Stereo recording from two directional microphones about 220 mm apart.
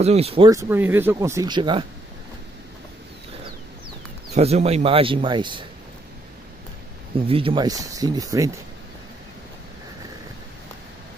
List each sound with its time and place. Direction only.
0.0 s a man's voice: 30° right (ahead or behind)
0.5 s speech: 10° right (ahead or behind)
4.4 s a man's voice: 30° right (ahead or behind)
7.2 s speech: 25° right (ahead or behind)